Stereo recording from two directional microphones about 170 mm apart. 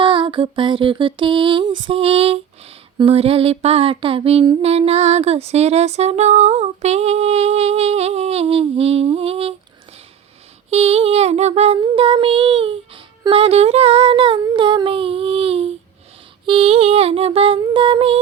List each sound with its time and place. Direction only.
0.0 s lullaby: 30° right (ahead or behind)
10.7 s lullaby: 35° right (ahead or behind)